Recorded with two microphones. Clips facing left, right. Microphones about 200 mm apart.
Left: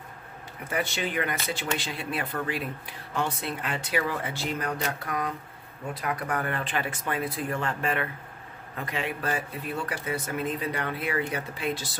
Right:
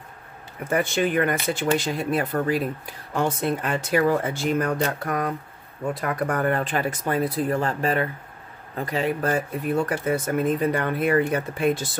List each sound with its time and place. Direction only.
0.7 s speech: 50° right (ahead or behind)